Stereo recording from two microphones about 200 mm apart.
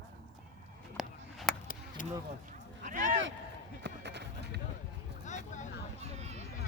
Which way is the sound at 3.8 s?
60° right (ahead or behind).